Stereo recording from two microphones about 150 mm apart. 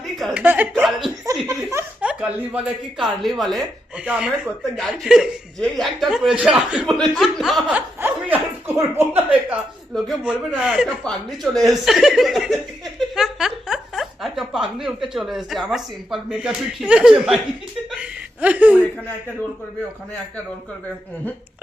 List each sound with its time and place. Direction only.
0.3 s speech: 10° right (ahead or behind)
0.7 s speech: centre (ahead or behind)
1.5 s laughter: 15° right (ahead or behind)
2.0 s a man's voice: 5° right (ahead or behind)
17.9 s chuckle: 10° right (ahead or behind)